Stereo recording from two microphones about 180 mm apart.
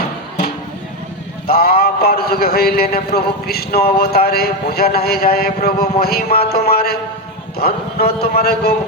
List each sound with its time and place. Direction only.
1.5 s a man's voice: 55° left (ahead or behind)